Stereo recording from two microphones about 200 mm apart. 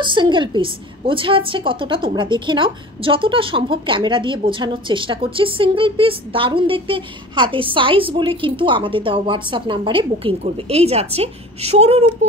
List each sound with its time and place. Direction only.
0.0 s a woman's voice: 25° right (ahead or behind)